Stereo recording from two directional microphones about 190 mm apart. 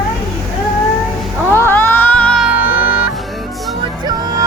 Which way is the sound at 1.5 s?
10° left (ahead or behind).